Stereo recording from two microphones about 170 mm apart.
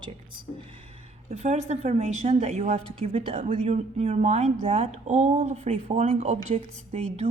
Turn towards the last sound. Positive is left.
turn(degrees=-35)  # may be behind; listen again after turning